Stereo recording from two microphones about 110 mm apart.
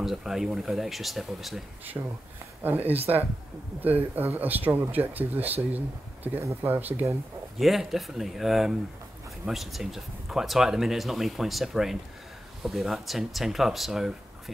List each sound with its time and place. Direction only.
0.0 s speech: 5° right (ahead or behind)
2.0 s speech: 25° right (ahead or behind)
7.5 s speech: centre (ahead or behind)